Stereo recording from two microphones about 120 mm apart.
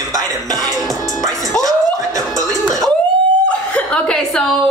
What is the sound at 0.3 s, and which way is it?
Music, 30° right (ahead or behind).